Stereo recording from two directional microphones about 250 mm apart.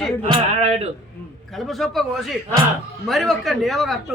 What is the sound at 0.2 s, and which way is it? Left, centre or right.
Speech, right.